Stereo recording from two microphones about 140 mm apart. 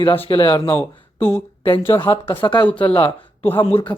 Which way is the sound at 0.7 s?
20° left (ahead or behind).